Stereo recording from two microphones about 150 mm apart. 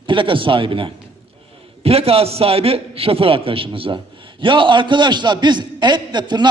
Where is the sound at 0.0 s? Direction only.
35° right (ahead or behind).